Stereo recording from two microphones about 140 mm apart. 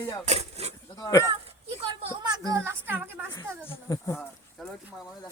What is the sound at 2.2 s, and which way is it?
Speech, 25° right (ahead or behind).